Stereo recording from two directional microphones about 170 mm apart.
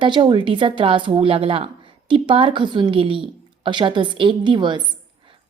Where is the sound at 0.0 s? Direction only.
30° right (ahead or behind).